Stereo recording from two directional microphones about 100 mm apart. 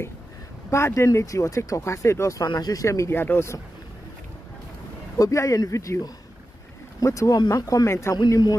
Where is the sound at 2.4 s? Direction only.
40° left (ahead or behind); by 3.6 s 25° left (ahead or behind).